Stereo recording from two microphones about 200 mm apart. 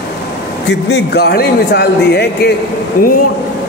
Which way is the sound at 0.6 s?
60° left (ahead or behind).